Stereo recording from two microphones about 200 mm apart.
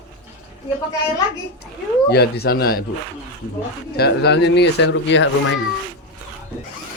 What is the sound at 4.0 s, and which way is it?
Speech, 55° left (ahead or behind).